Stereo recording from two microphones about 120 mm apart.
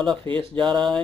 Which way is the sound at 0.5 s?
35° right (ahead or behind).